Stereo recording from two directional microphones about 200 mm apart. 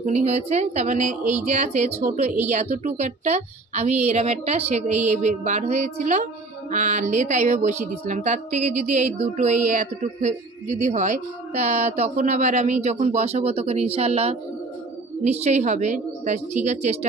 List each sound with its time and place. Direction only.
0.0 s a woman's voice: 35° right (ahead or behind)